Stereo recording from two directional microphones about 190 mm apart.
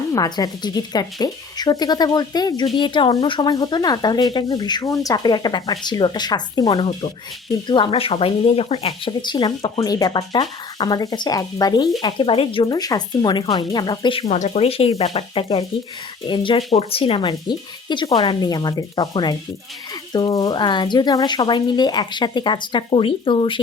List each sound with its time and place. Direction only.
0.1 s speech: 20° left (ahead or behind)